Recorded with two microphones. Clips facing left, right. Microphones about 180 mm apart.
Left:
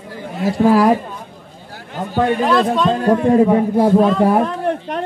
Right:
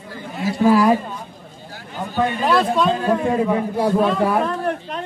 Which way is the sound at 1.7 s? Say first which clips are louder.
Left 4 dB; 85° left.